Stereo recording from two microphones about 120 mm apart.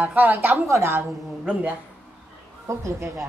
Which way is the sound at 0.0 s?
15° right (ahead or behind).